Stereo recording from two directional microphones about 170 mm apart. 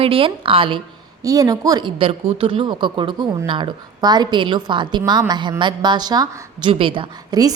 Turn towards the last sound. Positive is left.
turn(degrees=-25)  # may be behind; listen again after turning